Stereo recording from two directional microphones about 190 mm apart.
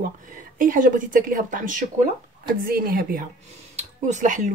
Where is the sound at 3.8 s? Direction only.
40° right (ahead or behind).